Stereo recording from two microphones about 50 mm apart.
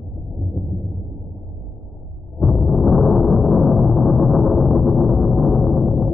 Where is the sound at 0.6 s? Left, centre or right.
Centre.